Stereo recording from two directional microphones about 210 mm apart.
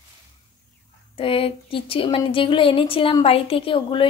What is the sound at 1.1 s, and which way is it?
Speech, 25° left (ahead or behind).